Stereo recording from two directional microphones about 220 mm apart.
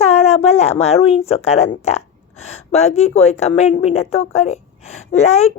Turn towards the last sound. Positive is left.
turn(degrees=30)  # may be behind; listen again after turning